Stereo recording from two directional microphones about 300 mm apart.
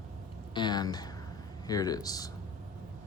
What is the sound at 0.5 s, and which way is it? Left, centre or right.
Speech, centre.